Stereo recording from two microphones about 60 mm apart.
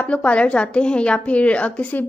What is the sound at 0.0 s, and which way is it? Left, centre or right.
A woman's voice, left.